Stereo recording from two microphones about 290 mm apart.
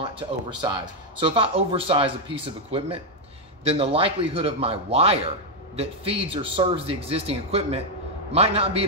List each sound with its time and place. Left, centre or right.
0.0 s speech: centre